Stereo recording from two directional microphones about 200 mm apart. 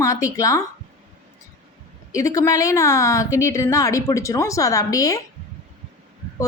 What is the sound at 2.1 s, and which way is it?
A woman's voice, 15° left (ahead or behind).